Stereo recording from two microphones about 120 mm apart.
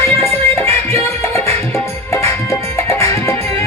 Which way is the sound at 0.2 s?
20° left (ahead or behind).